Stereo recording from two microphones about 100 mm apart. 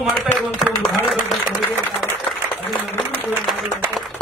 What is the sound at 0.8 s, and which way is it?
Speech, centre (ahead or behind).